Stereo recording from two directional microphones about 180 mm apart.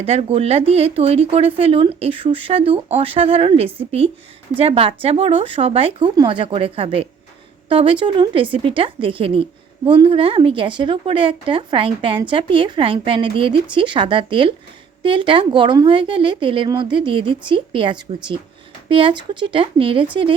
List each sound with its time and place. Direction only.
0.0 s speech: 35° right (ahead or behind)